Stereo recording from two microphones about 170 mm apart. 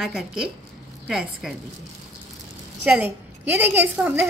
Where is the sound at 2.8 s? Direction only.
10° right (ahead or behind).